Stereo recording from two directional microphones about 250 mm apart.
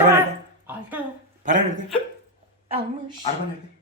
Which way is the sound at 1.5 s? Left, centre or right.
Right.